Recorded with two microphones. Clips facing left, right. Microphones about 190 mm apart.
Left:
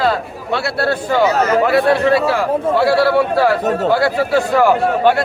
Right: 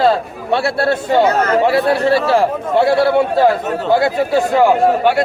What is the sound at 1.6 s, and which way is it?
Speech, 25° right (ahead or behind).